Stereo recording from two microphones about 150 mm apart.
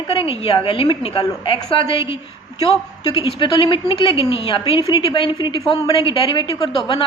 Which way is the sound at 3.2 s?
35° left (ahead or behind).